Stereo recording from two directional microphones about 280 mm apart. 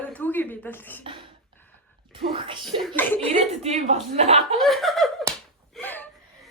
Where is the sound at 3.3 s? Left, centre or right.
Right.